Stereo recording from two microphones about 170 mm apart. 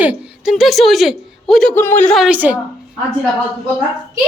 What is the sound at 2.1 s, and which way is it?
Speech, 5° right (ahead or behind).